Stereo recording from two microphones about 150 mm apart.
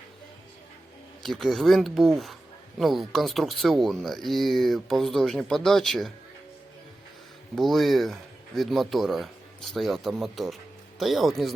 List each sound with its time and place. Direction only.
1.2 s speech: centre (ahead or behind)
7.5 s speech: centre (ahead or behind)